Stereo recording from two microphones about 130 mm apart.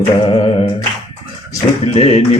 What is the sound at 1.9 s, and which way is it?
Speech, 55° left (ahead or behind).